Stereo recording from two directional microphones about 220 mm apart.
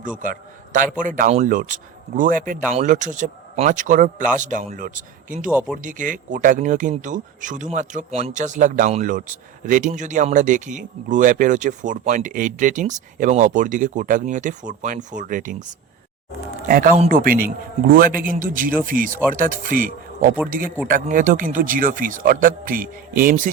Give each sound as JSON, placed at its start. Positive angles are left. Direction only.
{"t": 0.2, "sound": "speech", "side_deg": -35}
{"t": 5.5, "sound": "speech", "side_deg": -5}
{"t": 5.7, "sound": "speech", "side_deg": -35}
{"t": 16.6, "sound": "speech", "side_deg": -40}